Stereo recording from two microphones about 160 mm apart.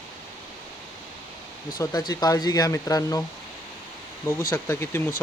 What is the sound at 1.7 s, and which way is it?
Speech, 25° left (ahead or behind).